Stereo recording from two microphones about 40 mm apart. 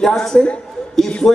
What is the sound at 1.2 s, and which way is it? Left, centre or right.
Speech, left.